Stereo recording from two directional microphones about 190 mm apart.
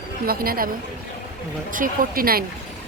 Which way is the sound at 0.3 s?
50° right (ahead or behind).